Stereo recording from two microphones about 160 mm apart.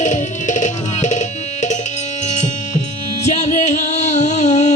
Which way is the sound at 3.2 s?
45° left (ahead or behind).